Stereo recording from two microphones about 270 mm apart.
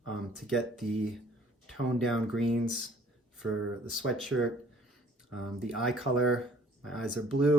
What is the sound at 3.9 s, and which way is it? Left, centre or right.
Speech, centre.